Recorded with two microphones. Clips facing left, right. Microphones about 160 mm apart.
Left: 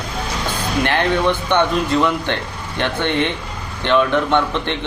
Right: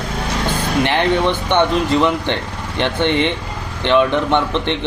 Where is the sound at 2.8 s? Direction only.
15° right (ahead or behind).